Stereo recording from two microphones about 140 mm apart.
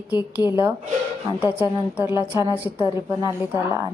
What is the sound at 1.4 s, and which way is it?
A woman's voice, 10° right (ahead or behind).